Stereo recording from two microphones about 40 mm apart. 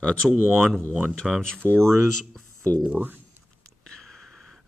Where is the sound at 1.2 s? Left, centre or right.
Centre.